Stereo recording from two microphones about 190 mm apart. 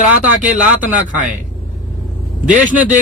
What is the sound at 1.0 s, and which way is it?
Speech, 40° right (ahead or behind).